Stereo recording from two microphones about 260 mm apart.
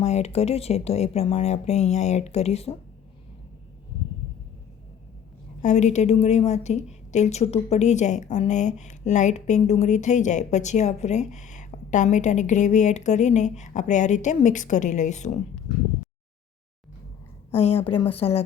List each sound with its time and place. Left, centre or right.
0.0 s speech: left
5.6 s speech: left
17.6 s speech: left